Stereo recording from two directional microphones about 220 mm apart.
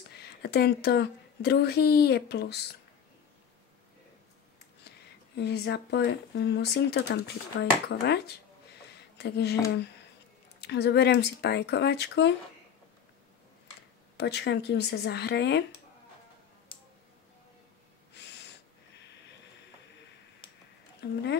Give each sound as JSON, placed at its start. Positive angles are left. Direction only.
{"t": 0.1, "sound": "speech", "side_deg": 45}
{"t": 4.8, "sound": "speech", "side_deg": 50}
{"t": 10.6, "sound": "speech", "side_deg": 50}
{"t": 14.1, "sound": "speech", "side_deg": 50}
{"t": 18.1, "sound": "snort", "side_deg": 50}
{"t": 21.0, "sound": "speech", "side_deg": 50}